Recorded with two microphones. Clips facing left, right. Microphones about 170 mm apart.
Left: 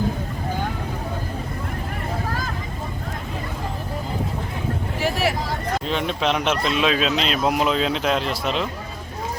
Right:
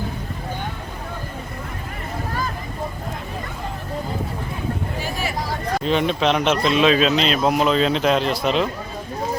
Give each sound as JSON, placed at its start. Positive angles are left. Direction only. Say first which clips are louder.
{"t": 4.9, "sound": "vehicle", "louder": "left 5 dB", "side_deg": 85}
{"t": 5.8, "sound": "speech", "louder": "right 6 dB", "side_deg": 0}